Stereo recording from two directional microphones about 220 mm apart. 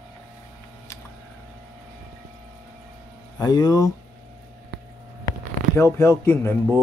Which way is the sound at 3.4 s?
20° left (ahead or behind).